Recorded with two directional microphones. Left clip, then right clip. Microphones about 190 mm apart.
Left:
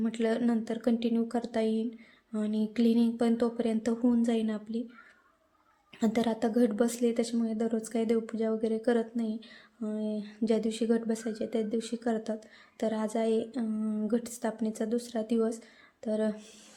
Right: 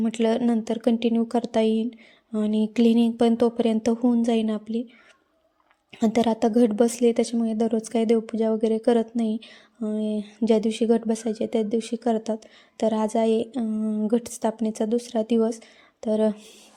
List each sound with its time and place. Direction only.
0.0 s a woman's voice: 30° right (ahead or behind)
5.9 s a woman's voice: 30° right (ahead or behind)